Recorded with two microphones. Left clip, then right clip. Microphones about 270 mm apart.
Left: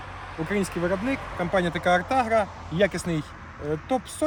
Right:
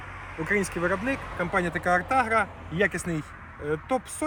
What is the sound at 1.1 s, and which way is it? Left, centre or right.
Speech, left.